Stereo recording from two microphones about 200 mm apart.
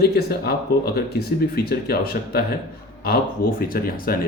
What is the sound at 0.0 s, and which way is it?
Speech, 50° left (ahead or behind).